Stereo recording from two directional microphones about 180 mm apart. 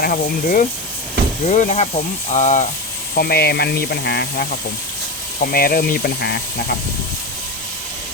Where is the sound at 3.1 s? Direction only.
60° left (ahead or behind).